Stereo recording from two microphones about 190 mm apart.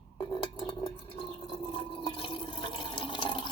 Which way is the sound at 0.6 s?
25° left (ahead or behind).